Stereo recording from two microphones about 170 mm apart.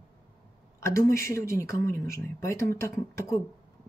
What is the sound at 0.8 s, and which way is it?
Speech, 15° left (ahead or behind).